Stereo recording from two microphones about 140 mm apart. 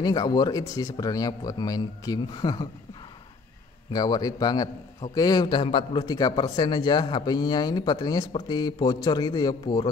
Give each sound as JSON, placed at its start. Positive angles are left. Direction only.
{"t": 0.0, "sound": "a man's voice", "side_deg": 30}
{"t": 3.9, "sound": "a man's voice", "side_deg": 30}